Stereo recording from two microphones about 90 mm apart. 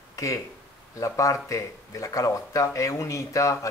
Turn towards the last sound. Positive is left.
turn(degrees=35)  # may be behind; listen again after turning